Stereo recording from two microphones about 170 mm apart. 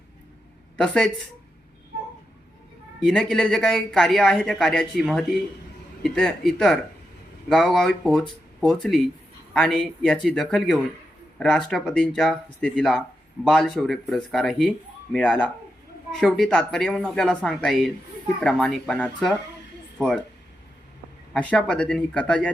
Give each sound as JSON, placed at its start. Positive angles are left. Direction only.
{"t": 0.8, "sound": "speech", "side_deg": 5}
{"t": 3.0, "sound": "speech", "side_deg": 5}
{"t": 21.3, "sound": "speech", "side_deg": 5}